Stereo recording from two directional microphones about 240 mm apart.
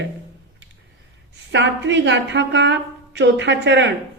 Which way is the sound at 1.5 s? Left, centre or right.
Right.